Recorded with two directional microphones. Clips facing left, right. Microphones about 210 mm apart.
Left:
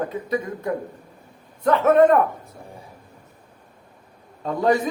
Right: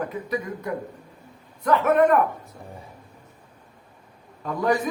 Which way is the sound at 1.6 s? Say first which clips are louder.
Left 3 dB; 25° left (ahead or behind).